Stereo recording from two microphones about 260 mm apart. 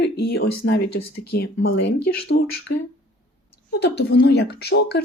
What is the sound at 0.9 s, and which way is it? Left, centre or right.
Speech, left.